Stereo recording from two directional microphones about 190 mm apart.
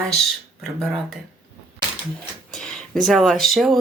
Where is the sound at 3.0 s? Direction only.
Centre (ahead or behind).